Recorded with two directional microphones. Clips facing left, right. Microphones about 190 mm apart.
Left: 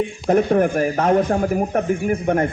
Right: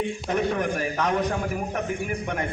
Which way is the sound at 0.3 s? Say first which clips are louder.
Left 10 dB; 45° left (ahead or behind).